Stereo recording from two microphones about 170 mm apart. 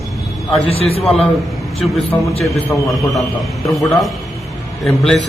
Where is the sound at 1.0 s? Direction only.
Centre (ahead or behind).